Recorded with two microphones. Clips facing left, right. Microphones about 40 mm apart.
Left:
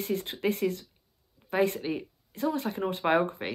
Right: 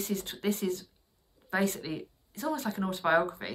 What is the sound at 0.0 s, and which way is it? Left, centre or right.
Speech, left.